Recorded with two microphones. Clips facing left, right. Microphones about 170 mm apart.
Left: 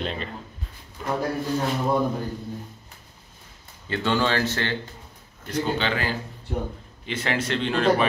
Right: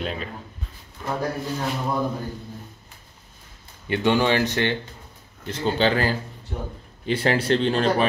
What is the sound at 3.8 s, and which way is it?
Speech, 15° right (ahead or behind).